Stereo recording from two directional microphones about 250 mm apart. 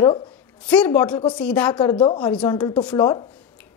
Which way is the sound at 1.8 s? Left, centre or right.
Centre.